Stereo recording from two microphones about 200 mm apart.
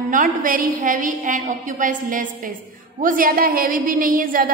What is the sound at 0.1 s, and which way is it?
A woman's voice, 40° right (ahead or behind).